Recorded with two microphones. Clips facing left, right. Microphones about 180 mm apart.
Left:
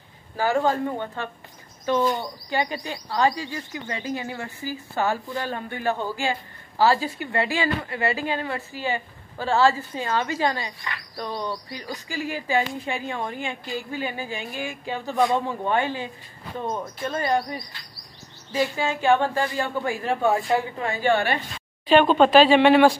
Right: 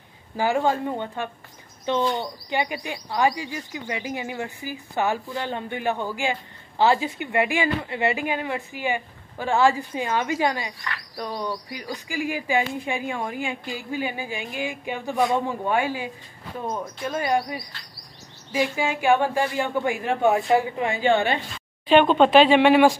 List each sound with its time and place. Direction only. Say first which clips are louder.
0.4 s speech: even; 15° right (ahead or behind)